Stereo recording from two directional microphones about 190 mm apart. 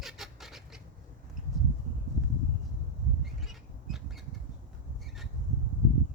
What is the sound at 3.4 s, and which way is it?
Squawk, centre (ahead or behind).